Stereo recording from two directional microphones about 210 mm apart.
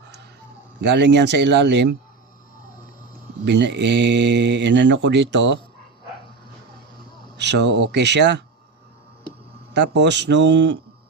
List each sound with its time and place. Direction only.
0.8 s speech: 55° right (ahead or behind)
3.4 s speech: 55° right (ahead or behind)
7.3 s speech: 55° right (ahead or behind)
9.7 s speech: 55° right (ahead or behind)